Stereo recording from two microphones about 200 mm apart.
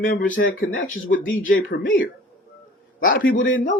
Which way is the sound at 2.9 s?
45° left (ahead or behind).